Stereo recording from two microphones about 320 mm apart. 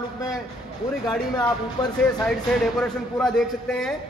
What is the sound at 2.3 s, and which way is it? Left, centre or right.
A man's voice, centre.